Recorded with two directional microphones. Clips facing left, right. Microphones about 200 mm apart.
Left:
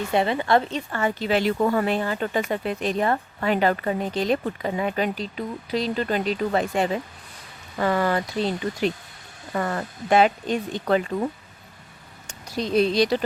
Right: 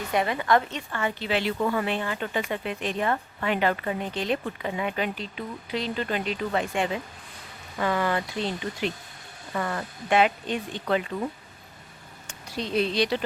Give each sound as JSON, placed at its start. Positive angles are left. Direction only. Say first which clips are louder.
{"t": 0.1, "sound": "a woman's voice", "louder": "left 2 dB", "side_deg": 30}
{"t": 12.5, "sound": "a woman's voice", "louder": "left 5 dB", "side_deg": 40}